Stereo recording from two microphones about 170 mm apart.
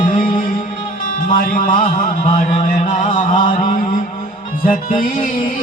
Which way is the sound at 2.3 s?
40° left (ahead or behind).